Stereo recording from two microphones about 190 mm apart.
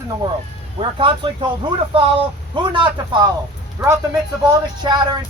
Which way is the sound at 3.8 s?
10° right (ahead or behind).